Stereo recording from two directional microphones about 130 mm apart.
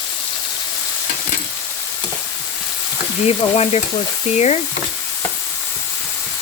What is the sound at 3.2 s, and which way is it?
Speech, 50° left (ahead or behind).